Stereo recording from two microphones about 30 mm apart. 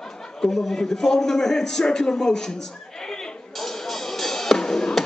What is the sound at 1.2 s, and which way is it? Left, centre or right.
Speech, centre.